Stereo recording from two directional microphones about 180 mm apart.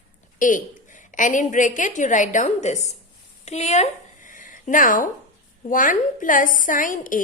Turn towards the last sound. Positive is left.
turn(degrees=50)  # may be behind; listen again after turning